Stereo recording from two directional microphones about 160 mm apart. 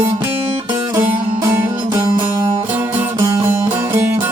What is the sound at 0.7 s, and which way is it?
Music, 15° right (ahead or behind).